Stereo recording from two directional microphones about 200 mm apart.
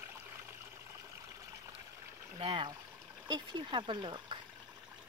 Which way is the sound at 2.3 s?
25° right (ahead or behind).